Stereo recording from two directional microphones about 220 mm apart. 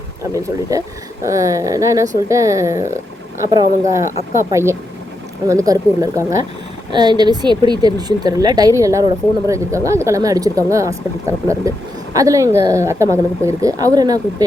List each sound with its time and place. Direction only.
0.2 s speech: 15° right (ahead or behind)